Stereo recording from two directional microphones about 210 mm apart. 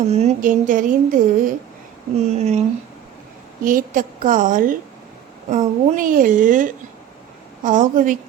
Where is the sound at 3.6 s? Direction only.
40° right (ahead or behind).